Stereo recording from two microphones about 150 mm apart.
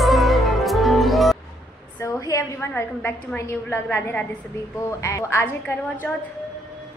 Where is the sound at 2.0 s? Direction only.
20° left (ahead or behind).